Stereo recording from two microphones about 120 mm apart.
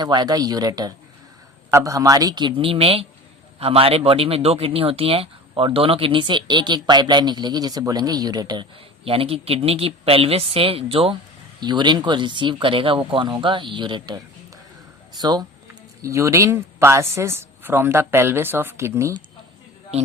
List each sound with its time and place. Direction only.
0.0 s speech: 35° right (ahead or behind)
9.0 s speech: 50° right (ahead or behind)
11.6 s speech: 40° right (ahead or behind); by 19.1 s 25° right (ahead or behind)
19.9 s a man's voice: 55° right (ahead or behind)